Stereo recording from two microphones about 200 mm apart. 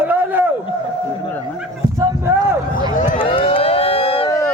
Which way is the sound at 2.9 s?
40° left (ahead or behind).